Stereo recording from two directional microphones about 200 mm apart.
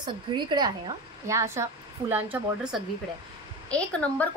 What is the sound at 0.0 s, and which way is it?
A woman's voice, 20° right (ahead or behind).